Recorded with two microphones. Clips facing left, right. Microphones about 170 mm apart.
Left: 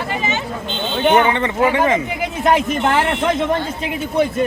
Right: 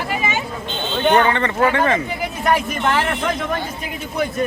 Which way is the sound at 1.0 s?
15° left (ahead or behind).